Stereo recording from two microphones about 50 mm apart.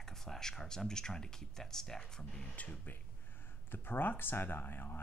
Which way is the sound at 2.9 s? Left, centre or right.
Left.